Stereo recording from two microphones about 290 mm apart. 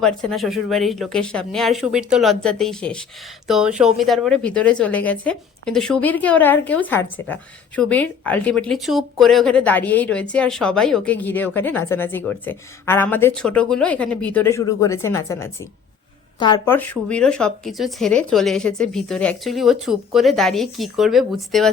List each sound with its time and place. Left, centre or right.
0.0 s speech: centre